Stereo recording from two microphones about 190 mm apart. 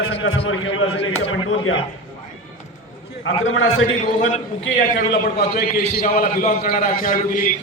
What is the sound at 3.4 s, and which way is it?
Speech, 90° left.